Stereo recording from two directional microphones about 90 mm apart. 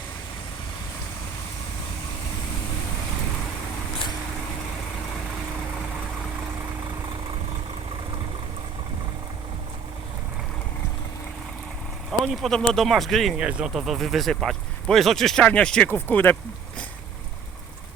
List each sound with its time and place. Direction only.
12.2 s speech: centre (ahead or behind)
13.3 s speech: 10° right (ahead or behind); by 16.8 s 20° left (ahead or behind)